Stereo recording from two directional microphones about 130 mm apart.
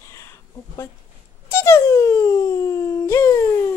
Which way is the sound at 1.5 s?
20° left (ahead or behind).